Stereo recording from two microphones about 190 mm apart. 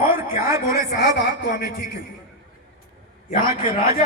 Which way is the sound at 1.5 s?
60° left (ahead or behind).